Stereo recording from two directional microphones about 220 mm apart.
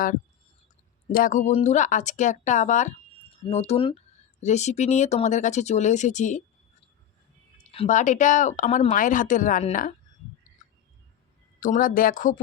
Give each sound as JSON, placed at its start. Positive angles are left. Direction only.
{"t": 1.1, "sound": "speech", "side_deg": 35}
{"t": 7.6, "sound": "speech", "side_deg": 30}
{"t": 11.6, "sound": "speech", "side_deg": 40}